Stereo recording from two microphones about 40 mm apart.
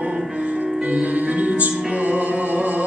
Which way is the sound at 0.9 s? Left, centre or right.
Right.